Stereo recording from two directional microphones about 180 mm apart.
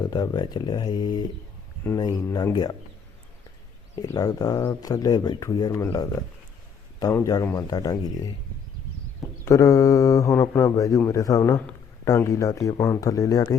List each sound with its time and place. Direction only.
0.0 s speech: 20° left (ahead or behind)
4.0 s speech: 20° left (ahead or behind)
9.4 s speech: 15° left (ahead or behind)